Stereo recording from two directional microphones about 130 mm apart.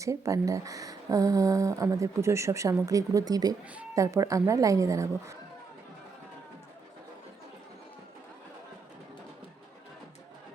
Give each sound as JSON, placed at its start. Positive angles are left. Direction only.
{"t": 0.0, "sound": "speech", "side_deg": -25}